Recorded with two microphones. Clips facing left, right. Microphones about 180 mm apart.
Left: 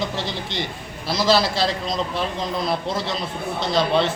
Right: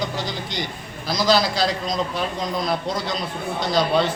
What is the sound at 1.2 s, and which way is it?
A man's voice, centre (ahead or behind).